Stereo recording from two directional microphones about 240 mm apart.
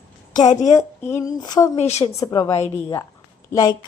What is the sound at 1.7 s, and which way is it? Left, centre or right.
Speech, left.